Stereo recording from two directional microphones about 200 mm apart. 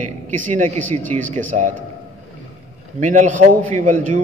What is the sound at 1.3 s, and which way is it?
Speech, 40° right (ahead or behind).